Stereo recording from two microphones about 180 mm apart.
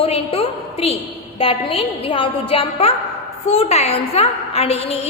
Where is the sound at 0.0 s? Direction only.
35° left (ahead or behind).